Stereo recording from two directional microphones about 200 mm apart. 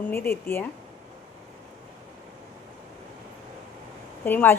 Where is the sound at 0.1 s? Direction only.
10° left (ahead or behind).